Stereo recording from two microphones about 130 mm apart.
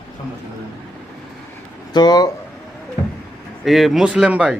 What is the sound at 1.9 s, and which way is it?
Speech, 30° left (ahead or behind).